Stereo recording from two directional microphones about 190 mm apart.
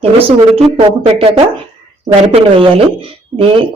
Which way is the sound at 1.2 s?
30° right (ahead or behind).